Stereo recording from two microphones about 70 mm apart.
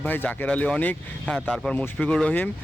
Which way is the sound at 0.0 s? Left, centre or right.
Left.